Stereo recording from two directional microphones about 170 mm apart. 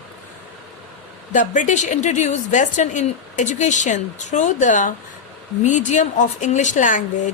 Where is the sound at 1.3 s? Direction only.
45° left (ahead or behind).